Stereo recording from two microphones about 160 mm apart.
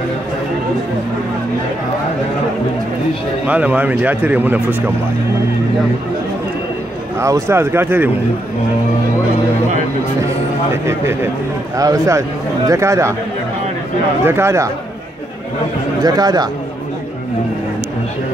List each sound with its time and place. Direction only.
3.4 s speech: 10° right (ahead or behind)
7.2 s speech: 15° right (ahead or behind)
10.7 s a man's voice: 15° right (ahead or behind)
14.2 s speech: 15° right (ahead or behind)
16.0 s a man's voice: 25° right (ahead or behind)